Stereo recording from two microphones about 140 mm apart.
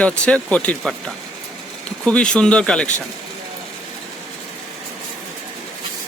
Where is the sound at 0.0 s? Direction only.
10° left (ahead or behind).